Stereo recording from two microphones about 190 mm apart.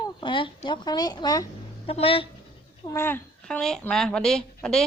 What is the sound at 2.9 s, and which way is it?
Speech, 10° left (ahead or behind).